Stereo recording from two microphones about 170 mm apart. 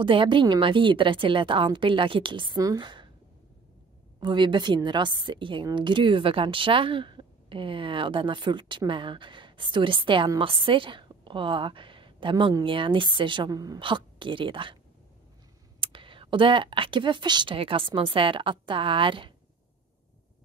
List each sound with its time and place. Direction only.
0.0 s a woman's voice: 30° right (ahead or behind)
4.2 s a woman's voice: 25° right (ahead or behind)
15.8 s speech: 30° right (ahead or behind)